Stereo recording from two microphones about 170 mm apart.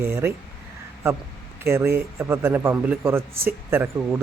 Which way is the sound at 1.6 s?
15° right (ahead or behind).